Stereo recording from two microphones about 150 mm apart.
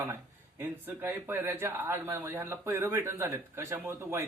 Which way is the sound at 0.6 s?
15° right (ahead or behind).